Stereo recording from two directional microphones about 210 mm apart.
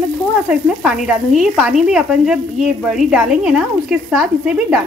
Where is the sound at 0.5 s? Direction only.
5° right (ahead or behind).